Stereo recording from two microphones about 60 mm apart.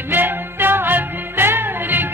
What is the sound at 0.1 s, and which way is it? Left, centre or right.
Music, right.